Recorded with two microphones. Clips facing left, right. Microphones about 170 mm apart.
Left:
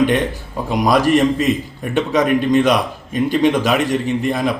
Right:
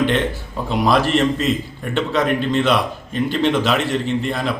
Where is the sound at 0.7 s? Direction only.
15° left (ahead or behind).